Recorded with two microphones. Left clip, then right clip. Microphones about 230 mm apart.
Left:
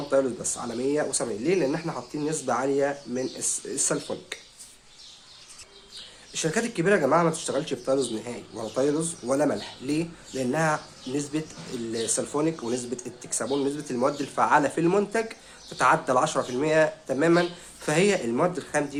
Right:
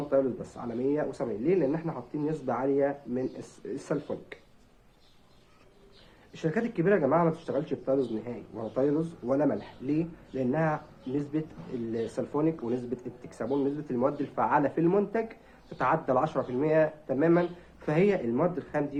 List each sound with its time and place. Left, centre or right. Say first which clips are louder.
0.1 s speech: left 3 dB; centre
6.3 s speech: left 3 dB; centre